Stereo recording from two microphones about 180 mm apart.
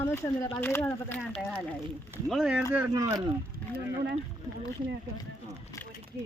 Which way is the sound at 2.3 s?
Centre (ahead or behind).